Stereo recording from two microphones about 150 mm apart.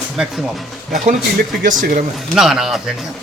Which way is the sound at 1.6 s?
65° right (ahead or behind).